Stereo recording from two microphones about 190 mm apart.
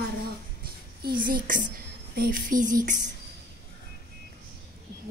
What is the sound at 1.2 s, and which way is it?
A child's voice, 45° right (ahead or behind).